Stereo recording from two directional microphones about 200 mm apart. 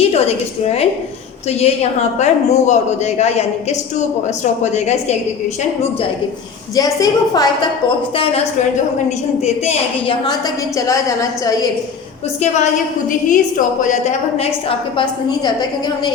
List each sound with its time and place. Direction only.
0.0 s a woman's voice: 30° left (ahead or behind)
6.7 s a woman's voice: 20° left (ahead or behind)
13.1 s a man's voice: 40° left (ahead or behind)
14.9 s a woman's voice: 20° left (ahead or behind)